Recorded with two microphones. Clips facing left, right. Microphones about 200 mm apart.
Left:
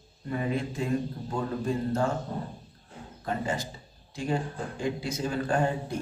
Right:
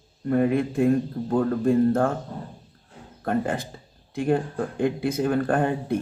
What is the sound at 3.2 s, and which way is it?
Speech, 55° right (ahead or behind).